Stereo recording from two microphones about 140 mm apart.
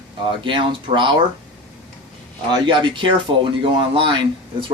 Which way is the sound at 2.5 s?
35° right (ahead or behind).